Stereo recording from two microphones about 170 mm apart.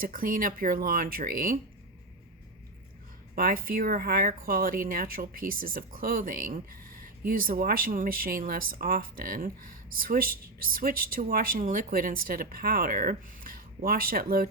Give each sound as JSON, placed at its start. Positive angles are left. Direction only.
{"t": 0.0, "sound": "speech", "side_deg": -55}
{"t": 3.3, "sound": "speech", "side_deg": -60}